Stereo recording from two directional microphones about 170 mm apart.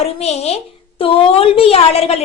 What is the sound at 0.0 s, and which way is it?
A woman's voice, 40° left (ahead or behind).